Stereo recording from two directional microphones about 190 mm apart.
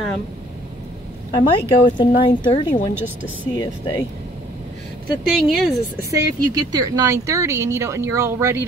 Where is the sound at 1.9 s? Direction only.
25° left (ahead or behind).